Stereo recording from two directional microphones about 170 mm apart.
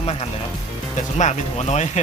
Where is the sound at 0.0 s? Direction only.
35° left (ahead or behind).